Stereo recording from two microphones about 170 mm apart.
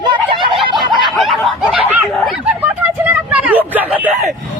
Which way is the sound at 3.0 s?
10° right (ahead or behind).